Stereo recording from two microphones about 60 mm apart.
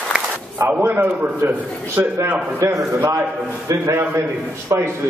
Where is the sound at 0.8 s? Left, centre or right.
Right.